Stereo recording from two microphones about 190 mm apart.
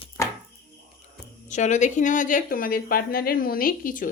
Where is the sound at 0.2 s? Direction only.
15° left (ahead or behind).